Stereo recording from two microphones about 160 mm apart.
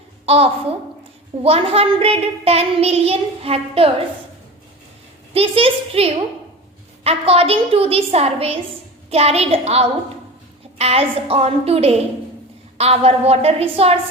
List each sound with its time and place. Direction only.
0.3 s child singing: 40° right (ahead or behind)
5.3 s child singing: 35° right (ahead or behind)